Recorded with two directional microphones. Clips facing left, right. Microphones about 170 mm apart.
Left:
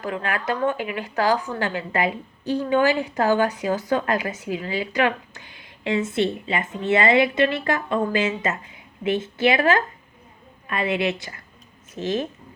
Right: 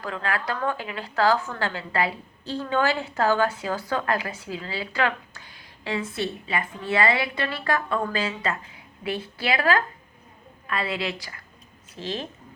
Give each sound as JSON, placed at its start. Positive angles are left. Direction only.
{"t": 0.0, "sound": "a woman's voice", "side_deg": 20}